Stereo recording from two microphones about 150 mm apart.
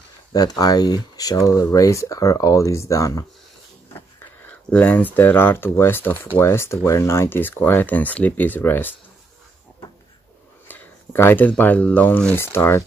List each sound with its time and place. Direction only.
0.3 s speech: 25° left (ahead or behind)
4.5 s speech: 10° left (ahead or behind)
10.7 s speech: 15° left (ahead or behind)